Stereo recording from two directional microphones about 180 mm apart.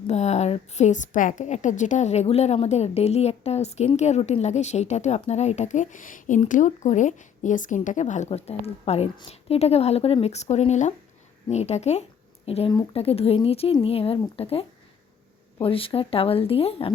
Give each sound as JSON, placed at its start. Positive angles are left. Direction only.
{"t": 0.1, "sound": "a woman's voice", "side_deg": 40}